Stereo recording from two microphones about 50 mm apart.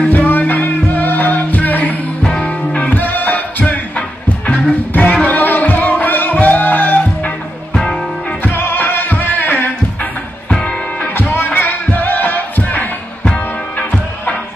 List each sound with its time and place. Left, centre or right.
0.1 s music: left
2.2 s music: centre
2.8 s music: left
7.7 s music: centre
8.4 s music: left
10.5 s music: left
11.1 s music: left